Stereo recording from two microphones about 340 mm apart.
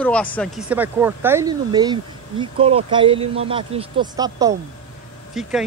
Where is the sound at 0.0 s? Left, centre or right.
Centre.